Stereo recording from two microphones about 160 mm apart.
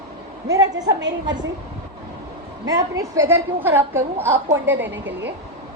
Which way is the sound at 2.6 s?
20° right (ahead or behind).